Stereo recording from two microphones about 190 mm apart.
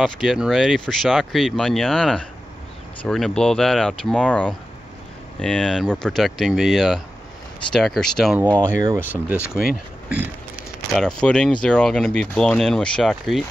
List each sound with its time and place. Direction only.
0.0 s speech: centre (ahead or behind)
8.5 s speech: 20° right (ahead or behind)
9.5 s speech: 5° right (ahead or behind)
10.9 s speech: 5° left (ahead or behind)